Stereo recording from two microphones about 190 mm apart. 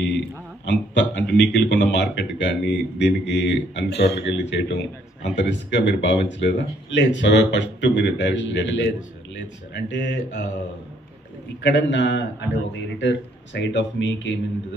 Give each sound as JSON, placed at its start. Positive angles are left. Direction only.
{"t": 0.7, "sound": "speech", "side_deg": 70}
{"t": 11.6, "sound": "speech", "side_deg": 70}